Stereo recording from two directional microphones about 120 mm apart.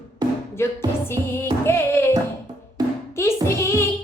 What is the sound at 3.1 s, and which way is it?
Music, 25° left (ahead or behind).